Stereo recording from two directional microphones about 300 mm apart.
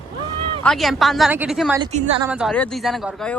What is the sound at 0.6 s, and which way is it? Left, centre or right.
Speech, centre.